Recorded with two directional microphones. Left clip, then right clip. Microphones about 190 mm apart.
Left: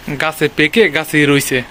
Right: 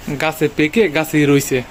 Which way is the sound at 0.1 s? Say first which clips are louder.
Left 2 dB; centre (ahead or behind).